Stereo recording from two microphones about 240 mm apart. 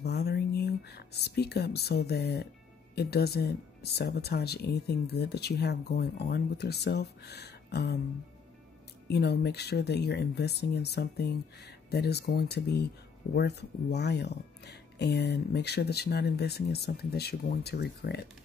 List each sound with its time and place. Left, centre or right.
0.0 s a sound: left
2.9 s speech: left
9.0 s speech: left